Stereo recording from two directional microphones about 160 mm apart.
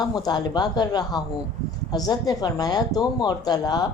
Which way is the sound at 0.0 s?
25° left (ahead or behind).